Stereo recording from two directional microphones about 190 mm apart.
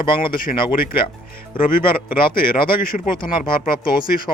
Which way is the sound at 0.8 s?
50° left (ahead or behind).